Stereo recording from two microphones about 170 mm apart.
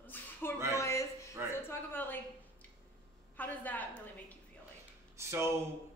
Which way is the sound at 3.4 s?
10° left (ahead or behind).